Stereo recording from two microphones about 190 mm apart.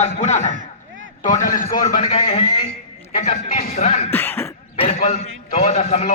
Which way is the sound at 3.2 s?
40° left (ahead or behind).